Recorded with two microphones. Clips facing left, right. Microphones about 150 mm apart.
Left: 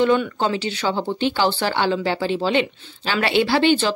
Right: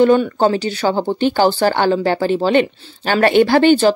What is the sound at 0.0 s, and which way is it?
Speech, 45° right (ahead or behind).